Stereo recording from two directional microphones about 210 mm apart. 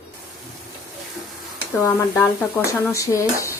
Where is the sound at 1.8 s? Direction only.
15° left (ahead or behind).